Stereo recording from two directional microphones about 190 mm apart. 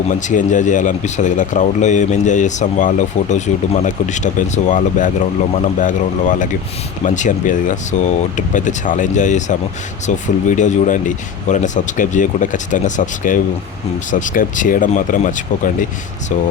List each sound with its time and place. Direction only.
0.1 s speech: 40° left (ahead or behind)